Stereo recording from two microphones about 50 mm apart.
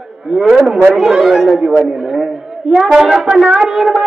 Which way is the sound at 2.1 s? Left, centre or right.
Centre.